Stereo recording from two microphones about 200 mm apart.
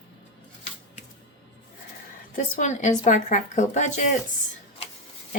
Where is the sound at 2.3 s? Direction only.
35° left (ahead or behind).